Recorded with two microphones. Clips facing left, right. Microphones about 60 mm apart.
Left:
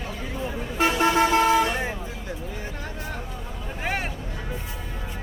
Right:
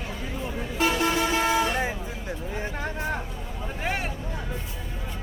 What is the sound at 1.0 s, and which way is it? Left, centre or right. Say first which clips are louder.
Vehicle: left 5 dB; left.